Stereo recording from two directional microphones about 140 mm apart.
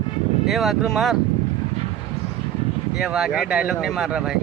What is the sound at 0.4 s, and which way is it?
Speech, centre (ahead or behind).